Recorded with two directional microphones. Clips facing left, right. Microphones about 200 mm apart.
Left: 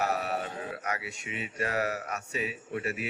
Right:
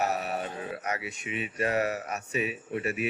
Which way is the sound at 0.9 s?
20° right (ahead or behind).